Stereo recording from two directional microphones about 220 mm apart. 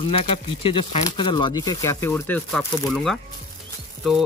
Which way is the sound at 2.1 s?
Centre (ahead or behind).